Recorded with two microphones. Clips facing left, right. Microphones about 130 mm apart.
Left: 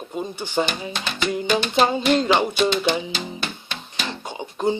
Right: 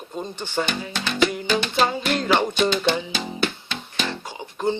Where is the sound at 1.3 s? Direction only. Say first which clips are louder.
Left 3 dB; 20° left (ahead or behind).